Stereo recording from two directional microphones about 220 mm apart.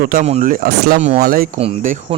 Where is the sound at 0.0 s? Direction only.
40° right (ahead or behind).